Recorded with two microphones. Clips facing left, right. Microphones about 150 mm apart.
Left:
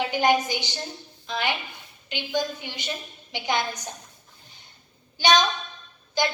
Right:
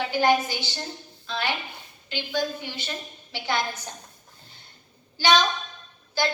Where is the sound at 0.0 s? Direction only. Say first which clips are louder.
Even; 15° left (ahead or behind).